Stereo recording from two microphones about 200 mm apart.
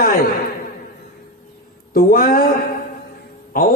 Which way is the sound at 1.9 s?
45° left (ahead or behind).